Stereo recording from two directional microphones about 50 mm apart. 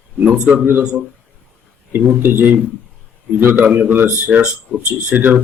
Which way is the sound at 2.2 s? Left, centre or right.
Right.